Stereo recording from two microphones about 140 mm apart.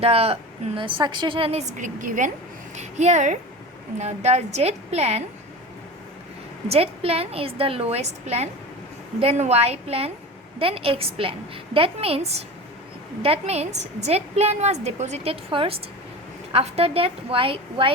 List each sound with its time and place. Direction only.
0.0 s a woman's voice: 45° right (ahead or behind); by 2.3 s 65° right (ahead or behind)
2.7 s a woman's voice: 55° right (ahead or behind)
6.7 s a woman's voice: 45° right (ahead or behind)